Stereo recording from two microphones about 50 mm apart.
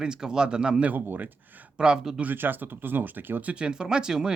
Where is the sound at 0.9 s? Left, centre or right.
Right.